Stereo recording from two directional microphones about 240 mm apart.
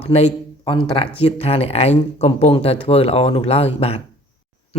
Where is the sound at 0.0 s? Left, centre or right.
Left.